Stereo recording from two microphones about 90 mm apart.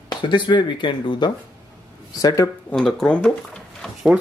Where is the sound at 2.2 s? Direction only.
40° left (ahead or behind).